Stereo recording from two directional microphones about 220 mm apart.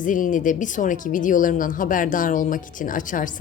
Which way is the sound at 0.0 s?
35° left (ahead or behind).